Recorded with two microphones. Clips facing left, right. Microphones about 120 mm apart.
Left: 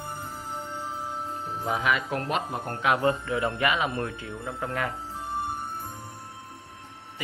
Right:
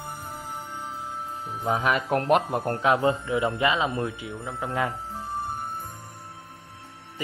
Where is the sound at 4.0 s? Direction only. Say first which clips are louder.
Right 2 dB; 15° right (ahead or behind).